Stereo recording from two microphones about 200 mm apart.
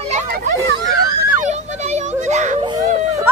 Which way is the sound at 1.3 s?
35° right (ahead or behind).